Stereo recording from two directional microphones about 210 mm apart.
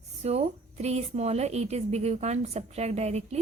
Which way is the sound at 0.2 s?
30° right (ahead or behind).